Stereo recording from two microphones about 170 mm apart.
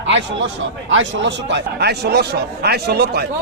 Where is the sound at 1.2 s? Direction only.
90° right.